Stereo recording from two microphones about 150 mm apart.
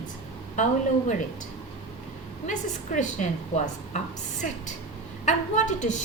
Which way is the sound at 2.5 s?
55° left (ahead or behind).